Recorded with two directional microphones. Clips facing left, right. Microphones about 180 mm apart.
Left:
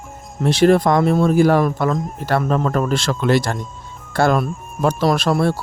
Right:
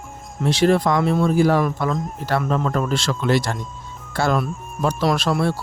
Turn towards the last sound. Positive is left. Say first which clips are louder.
# left 3 dB
turn(degrees=50)  # may be behind; listen again after turning